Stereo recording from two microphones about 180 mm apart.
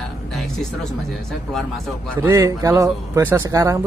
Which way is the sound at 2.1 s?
15° right (ahead or behind).